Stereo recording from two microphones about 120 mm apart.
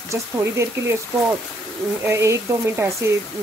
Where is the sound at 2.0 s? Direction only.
25° right (ahead or behind).